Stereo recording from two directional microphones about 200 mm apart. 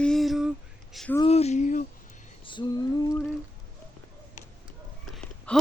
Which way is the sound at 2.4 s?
25° left (ahead or behind).